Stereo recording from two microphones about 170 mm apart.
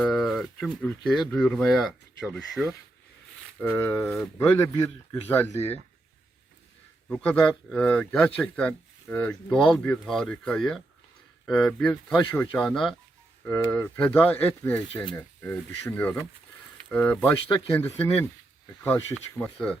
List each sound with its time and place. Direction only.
0.0 s speech: 5° left (ahead or behind)
3.6 s speech: 15° left (ahead or behind)
7.1 s speech: 5° left (ahead or behind)